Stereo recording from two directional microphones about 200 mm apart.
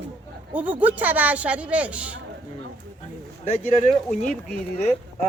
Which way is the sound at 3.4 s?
30° left (ahead or behind).